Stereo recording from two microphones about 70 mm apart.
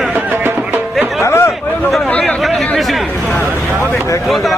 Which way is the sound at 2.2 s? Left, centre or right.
Centre.